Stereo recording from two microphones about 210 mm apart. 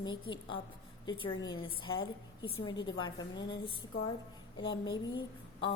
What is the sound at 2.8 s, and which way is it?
Speech, 60° left (ahead or behind).